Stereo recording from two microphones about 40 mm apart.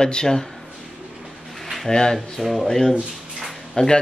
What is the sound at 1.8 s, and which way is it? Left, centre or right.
Speech, centre.